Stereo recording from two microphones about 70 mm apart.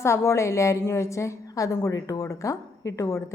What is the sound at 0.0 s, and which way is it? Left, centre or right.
A woman's voice, left.